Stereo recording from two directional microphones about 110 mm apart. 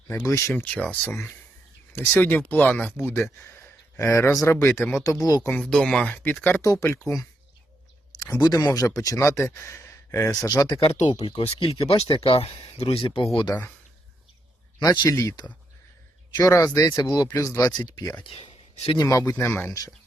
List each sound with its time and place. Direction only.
0.3 s speech: 25° left (ahead or behind)
0.5 s speech: 15° left (ahead or behind)
5.2 s speech: 35° left (ahead or behind)
5.5 s speech: 10° left (ahead or behind)
6.1 s speech: 15° left (ahead or behind)
6.6 s speech: 30° left (ahead or behind)
8.2 s speech: 35° left (ahead or behind)
11.3 s speech: 60° left (ahead or behind)
13.5 s speech: 15° left (ahead or behind)
14.8 s speech: 40° left (ahead or behind)
18.3 s a sound: 60° left (ahead or behind)
18.9 s speech: 30° left (ahead or behind)